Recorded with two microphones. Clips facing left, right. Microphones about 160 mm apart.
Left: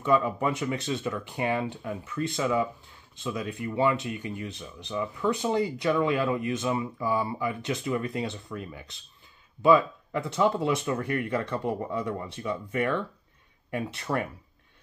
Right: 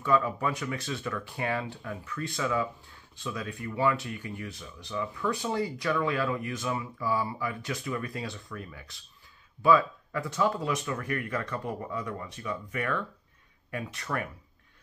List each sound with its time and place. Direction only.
0.0 s speech: 20° left (ahead or behind)